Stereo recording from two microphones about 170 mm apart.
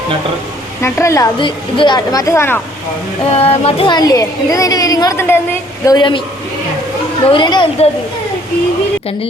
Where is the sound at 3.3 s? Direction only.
35° left (ahead or behind); by 5.4 s 15° left (ahead or behind).